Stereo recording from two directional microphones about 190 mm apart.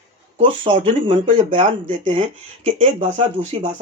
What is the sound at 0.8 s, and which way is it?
Speech, 30° right (ahead or behind).